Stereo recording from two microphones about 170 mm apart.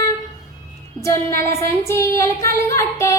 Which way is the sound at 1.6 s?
15° left (ahead or behind).